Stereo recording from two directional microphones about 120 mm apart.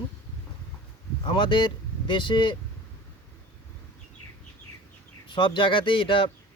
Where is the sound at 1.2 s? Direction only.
45° left (ahead or behind).